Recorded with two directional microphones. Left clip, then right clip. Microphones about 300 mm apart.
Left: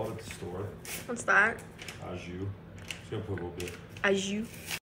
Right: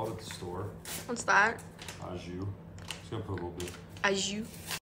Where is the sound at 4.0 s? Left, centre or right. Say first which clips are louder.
Left 1 dB; centre.